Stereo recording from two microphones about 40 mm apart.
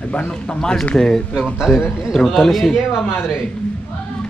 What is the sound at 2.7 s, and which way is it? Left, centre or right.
Speech, centre.